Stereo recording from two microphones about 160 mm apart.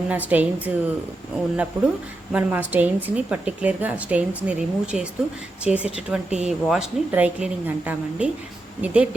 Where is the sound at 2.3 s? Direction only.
10° right (ahead or behind).